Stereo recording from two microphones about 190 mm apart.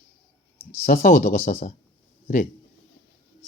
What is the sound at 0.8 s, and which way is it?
Speech, 45° left (ahead or behind).